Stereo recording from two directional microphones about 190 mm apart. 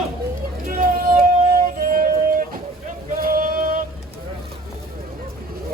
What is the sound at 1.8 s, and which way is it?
Music, 50° right (ahead or behind).